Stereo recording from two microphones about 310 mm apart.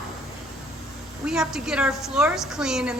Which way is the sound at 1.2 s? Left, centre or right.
Centre.